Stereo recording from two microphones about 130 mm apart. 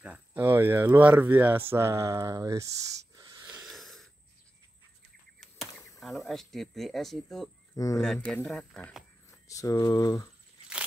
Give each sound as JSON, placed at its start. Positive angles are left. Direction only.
{"t": 0.0, "sound": "speech", "side_deg": -10}
{"t": 3.2, "sound": "wheeze", "side_deg": -30}
{"t": 3.4, "sound": "a sound", "side_deg": -5}
{"t": 5.4, "sound": "speech", "side_deg": 0}
{"t": 7.7, "sound": "speech", "side_deg": 25}
{"t": 8.0, "sound": "speech", "side_deg": 5}
{"t": 9.5, "sound": "speech", "side_deg": 25}